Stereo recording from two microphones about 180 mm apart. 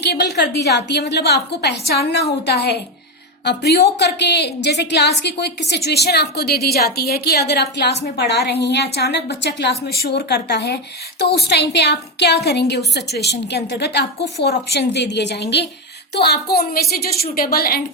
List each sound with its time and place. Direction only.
0.0 s a woman's voice: 65° left (ahead or behind)